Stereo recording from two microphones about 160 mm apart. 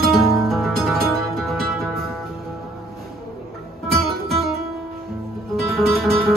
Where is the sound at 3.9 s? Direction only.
Centre (ahead or behind).